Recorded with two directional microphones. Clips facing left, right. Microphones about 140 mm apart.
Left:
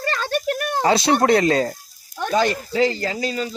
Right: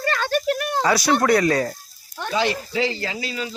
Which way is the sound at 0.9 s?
25° left (ahead or behind).